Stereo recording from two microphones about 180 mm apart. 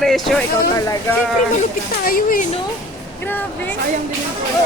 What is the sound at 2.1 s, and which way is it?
Speech, 50° left (ahead or behind).